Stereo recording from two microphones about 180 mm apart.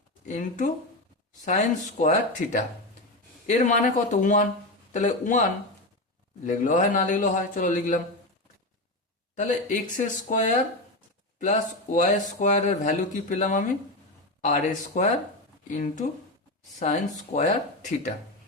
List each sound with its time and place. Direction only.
0.3 s speech: 45° left (ahead or behind)
9.3 s speech: 45° left (ahead or behind)